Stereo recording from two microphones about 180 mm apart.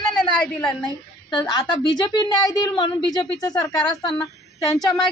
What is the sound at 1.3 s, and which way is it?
A woman's voice, 25° left (ahead or behind).